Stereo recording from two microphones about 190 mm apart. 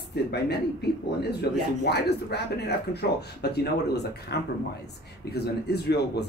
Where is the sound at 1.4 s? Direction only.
60° left (ahead or behind).